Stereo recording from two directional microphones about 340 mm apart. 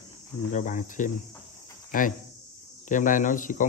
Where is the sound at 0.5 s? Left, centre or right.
Left.